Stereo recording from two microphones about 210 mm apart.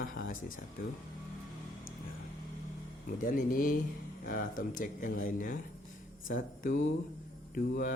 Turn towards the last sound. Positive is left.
turn(degrees=40)  # may be behind; listen again after turning